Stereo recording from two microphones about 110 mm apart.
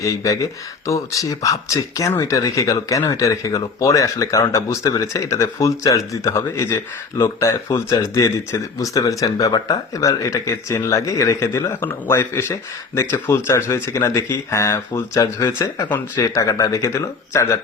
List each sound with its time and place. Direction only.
0.0 s speech: 30° left (ahead or behind)